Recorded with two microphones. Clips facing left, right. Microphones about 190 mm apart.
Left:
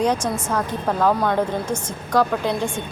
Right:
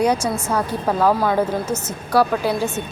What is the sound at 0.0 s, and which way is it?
A woman's voice, 10° right (ahead or behind).